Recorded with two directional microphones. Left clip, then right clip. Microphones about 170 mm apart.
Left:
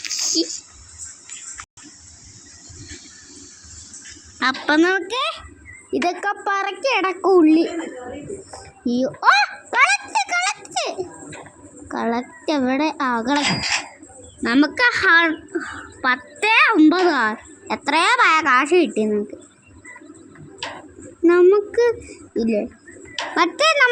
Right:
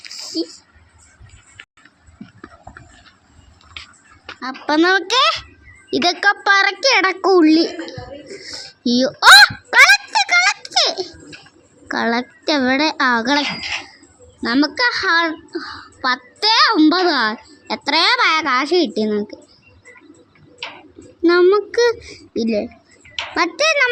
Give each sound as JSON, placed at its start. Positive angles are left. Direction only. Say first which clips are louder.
{"t": 0.0, "sound": "a sound", "louder": "left 4 dB", "side_deg": 0}
{"t": 4.4, "sound": "a sound", "louder": "left 8 dB", "side_deg": 30}
{"t": 4.9, "sound": "a child's voice", "louder": "right 7 dB", "side_deg": -35}
{"t": 6.1, "sound": "a child's voice", "louder": "right 9 dB", "side_deg": -20}
{"t": 9.6, "sound": "baby laughter", "louder": "right 7 dB", "side_deg": -15}
{"t": 11.9, "sound": "a woman's voice", "louder": "right 4 dB", "side_deg": -15}
{"t": 13.4, "sound": "speech", "louder": "left 2 dB", "side_deg": 25}
{"t": 14.4, "sound": "a woman's voice", "louder": "even", "side_deg": -5}
{"t": 20.6, "sound": "tick-tock", "louder": "even", "side_deg": 25}
{"t": 21.2, "sound": "a child's voice", "louder": "right 1 dB", "side_deg": -10}